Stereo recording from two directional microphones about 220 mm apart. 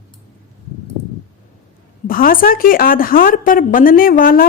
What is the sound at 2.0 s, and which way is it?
A woman's voice, 40° left (ahead or behind).